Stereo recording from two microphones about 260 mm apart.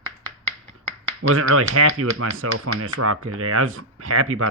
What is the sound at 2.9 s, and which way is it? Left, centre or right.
Speech, right.